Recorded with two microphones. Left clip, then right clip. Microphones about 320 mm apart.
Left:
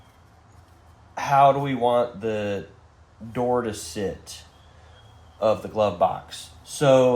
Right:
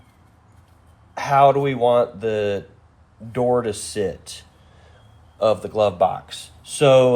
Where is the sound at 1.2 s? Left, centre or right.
Right.